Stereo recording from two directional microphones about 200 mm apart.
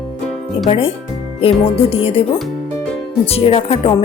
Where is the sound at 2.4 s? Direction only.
Centre (ahead or behind).